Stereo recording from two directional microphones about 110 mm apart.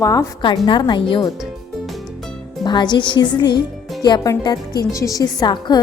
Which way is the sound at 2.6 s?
40° left (ahead or behind).